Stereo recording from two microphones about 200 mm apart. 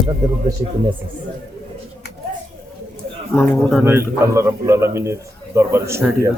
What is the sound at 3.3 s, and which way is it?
Speech, 5° left (ahead or behind).